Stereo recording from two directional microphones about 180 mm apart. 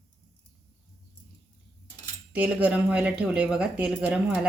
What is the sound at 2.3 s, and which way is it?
A woman's voice, 5° right (ahead or behind).